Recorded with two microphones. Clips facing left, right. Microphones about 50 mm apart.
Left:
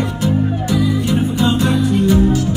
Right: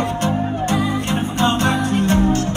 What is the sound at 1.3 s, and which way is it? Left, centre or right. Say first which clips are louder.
Music: right 1 dB; right.